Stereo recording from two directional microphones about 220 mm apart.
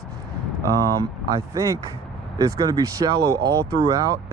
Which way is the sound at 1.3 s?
15° right (ahead or behind).